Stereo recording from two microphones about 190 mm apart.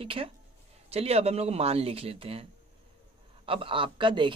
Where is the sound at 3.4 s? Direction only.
25° right (ahead or behind).